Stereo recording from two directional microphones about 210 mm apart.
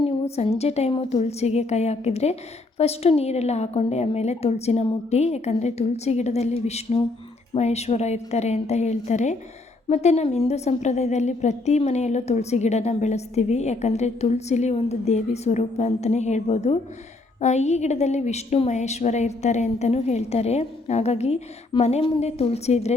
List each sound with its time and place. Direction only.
0.0 s a woman's voice: 25° left (ahead or behind)